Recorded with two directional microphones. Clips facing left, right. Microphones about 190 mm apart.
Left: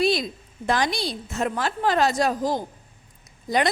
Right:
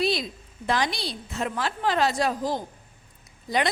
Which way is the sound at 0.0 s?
45° left (ahead or behind).